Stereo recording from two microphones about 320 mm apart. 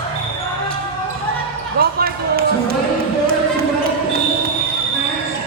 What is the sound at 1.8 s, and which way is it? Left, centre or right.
Basketball bounce, right.